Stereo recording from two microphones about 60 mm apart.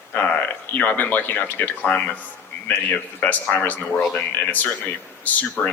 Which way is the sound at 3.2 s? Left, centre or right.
Left.